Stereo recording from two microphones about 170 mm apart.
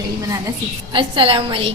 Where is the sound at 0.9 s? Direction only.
30° right (ahead or behind).